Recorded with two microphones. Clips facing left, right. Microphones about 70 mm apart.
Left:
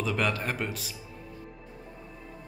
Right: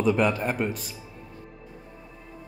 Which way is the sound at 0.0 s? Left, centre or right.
Centre.